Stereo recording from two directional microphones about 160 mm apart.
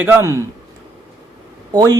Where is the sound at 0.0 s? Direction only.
15° right (ahead or behind).